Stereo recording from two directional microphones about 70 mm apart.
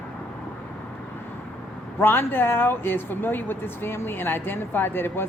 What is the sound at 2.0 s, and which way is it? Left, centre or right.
Speech, left.